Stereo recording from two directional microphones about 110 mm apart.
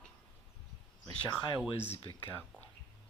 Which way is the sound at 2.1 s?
50° right (ahead or behind).